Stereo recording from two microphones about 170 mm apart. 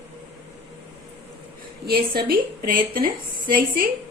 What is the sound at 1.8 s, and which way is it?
A woman's voice, 60° right (ahead or behind).